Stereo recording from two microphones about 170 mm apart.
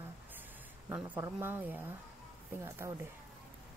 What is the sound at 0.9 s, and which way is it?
Speech, 10° right (ahead or behind).